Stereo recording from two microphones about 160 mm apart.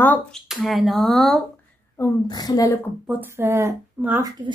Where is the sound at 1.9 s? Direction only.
25° left (ahead or behind).